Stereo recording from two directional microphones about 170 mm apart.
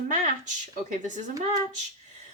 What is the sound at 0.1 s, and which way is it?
Speech, 45° right (ahead or behind).